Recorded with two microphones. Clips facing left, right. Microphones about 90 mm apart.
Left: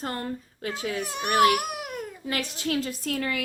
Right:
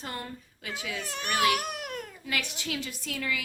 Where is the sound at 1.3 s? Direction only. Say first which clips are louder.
Left 6 dB; 50° left (ahead or behind).